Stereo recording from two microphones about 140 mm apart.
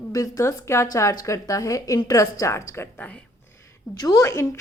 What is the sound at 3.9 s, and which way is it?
Speech, 25° left (ahead or behind).